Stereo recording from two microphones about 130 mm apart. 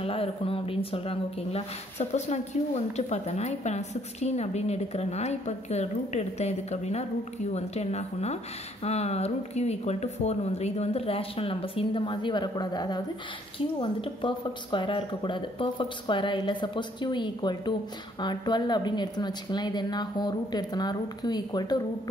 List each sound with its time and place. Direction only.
0.0 s speech: 45° left (ahead or behind)